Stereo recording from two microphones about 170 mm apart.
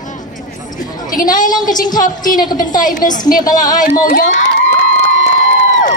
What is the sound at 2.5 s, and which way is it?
Speech, 25° left (ahead or behind).